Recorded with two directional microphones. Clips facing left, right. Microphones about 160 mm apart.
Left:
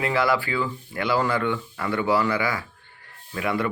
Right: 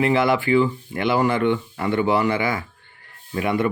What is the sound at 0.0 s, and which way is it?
Speech, 20° right (ahead or behind).